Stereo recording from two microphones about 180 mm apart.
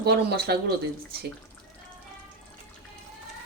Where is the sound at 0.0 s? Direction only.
65° right (ahead or behind).